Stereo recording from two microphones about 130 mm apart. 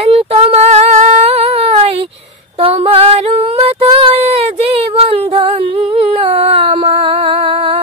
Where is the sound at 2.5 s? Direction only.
50° right (ahead or behind).